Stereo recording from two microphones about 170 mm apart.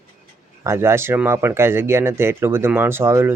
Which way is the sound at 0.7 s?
15° right (ahead or behind).